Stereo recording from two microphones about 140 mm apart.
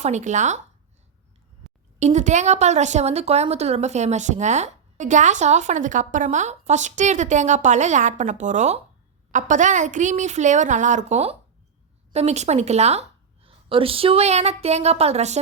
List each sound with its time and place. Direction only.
0.0 s a woman's voice: 55° right (ahead or behind)
1.6 s a sound: centre (ahead or behind)
2.0 s a woman's voice: 55° right (ahead or behind)